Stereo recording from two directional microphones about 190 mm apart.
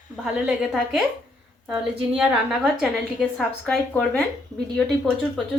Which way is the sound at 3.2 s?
5° left (ahead or behind).